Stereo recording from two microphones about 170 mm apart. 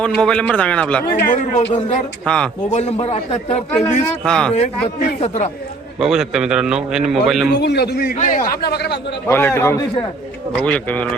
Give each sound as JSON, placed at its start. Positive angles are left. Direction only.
{"t": 0.0, "sound": "a man's voice", "side_deg": 5}
{"t": 1.0, "sound": "a man's voice", "side_deg": 45}
{"t": 2.2, "sound": "a man's voice", "side_deg": 5}
{"t": 2.6, "sound": "a man's voice", "side_deg": 40}
{"t": 4.2, "sound": "a man's voice", "side_deg": 5}
{"t": 4.5, "sound": "a man's voice", "side_deg": 45}
{"t": 6.0, "sound": "a man's voice", "side_deg": -5}
{"t": 7.6, "sound": "a man's voice", "side_deg": 75}
{"t": 8.1, "sound": "a man's voice", "side_deg": 45}
{"t": 8.6, "sound": "a man's voice", "side_deg": 75}
{"t": 9.2, "sound": "a man's voice", "side_deg": 15}